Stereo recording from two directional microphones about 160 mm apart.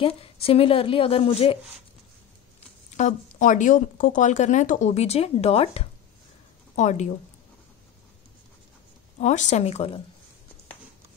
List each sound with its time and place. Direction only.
0.0 s a woman's voice: 35° left (ahead or behind)
3.0 s speech: 50° left (ahead or behind)
9.2 s speech: 50° left (ahead or behind)